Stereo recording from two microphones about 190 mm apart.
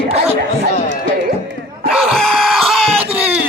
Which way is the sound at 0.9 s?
70° right (ahead or behind).